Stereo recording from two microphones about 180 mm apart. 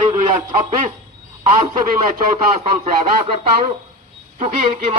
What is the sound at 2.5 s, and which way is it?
A man's voice, 35° right (ahead or behind).